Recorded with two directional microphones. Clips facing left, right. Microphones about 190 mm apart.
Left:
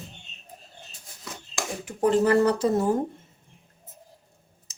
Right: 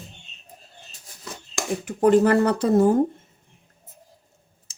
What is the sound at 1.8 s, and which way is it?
Speech, 60° right (ahead or behind).